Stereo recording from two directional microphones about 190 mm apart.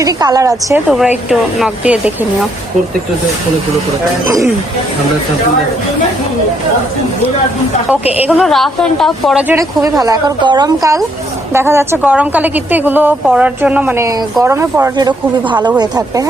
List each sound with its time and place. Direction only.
0.0 s a woman's voice: 20° right (ahead or behind)
0.9 s a woman's voice: 5° right (ahead or behind)
4.3 s a woman's voice: 15° right (ahead or behind)
7.9 s a woman's voice: 10° right (ahead or behind)